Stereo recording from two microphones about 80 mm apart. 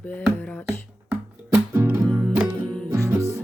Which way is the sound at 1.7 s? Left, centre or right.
Right.